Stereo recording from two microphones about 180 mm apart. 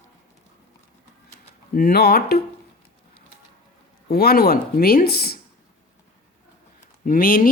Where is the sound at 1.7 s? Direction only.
60° left (ahead or behind).